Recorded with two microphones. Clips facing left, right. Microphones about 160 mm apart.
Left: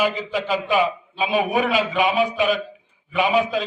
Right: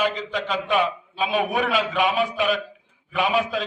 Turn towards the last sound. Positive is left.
turn(degrees=0)  # may be behind; listen again after turning